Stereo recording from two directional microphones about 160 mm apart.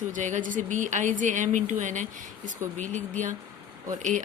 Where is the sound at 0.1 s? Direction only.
50° right (ahead or behind).